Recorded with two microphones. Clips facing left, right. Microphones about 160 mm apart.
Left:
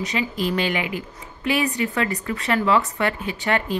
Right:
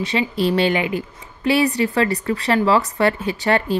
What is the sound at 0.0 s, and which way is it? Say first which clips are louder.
A woman's voice: right 5 dB; 30° right (ahead or behind).